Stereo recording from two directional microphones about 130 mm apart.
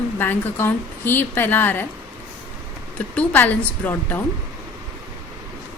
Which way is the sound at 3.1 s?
10° left (ahead or behind).